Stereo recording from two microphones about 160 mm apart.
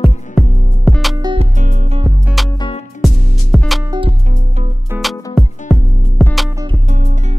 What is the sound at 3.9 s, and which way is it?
Music, 35° right (ahead or behind).